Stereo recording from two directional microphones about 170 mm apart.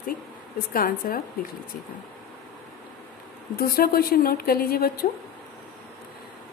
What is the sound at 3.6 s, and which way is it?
A woman's voice, 60° left (ahead or behind).